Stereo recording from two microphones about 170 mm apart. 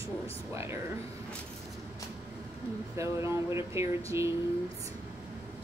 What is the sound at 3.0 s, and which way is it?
Speech, 15° right (ahead or behind).